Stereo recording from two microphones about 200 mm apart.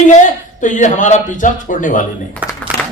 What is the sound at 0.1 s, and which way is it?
Speech, 40° left (ahead or behind).